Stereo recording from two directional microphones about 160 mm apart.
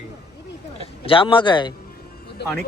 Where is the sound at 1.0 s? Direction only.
35° left (ahead or behind).